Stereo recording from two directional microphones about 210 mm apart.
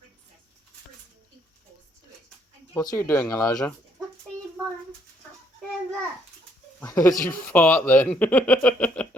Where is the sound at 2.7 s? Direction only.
15° left (ahead or behind).